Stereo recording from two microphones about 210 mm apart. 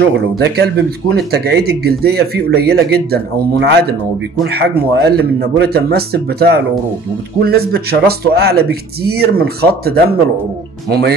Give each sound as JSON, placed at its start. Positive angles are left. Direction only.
{"t": 0.0, "sound": "speech", "side_deg": -50}